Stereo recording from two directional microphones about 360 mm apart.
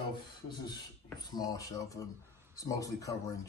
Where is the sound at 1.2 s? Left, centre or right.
Centre.